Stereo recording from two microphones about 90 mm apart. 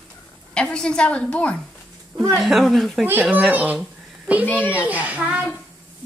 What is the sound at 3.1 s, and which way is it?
Speech, 20° right (ahead or behind).